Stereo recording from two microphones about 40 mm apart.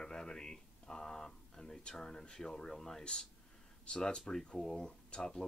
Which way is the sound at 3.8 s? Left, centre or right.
Left.